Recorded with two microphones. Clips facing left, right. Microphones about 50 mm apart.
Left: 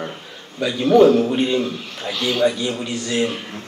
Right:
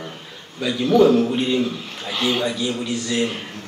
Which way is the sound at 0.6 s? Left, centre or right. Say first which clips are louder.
Left 2 dB; centre.